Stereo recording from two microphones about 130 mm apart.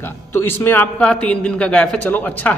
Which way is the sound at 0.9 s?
10° left (ahead or behind).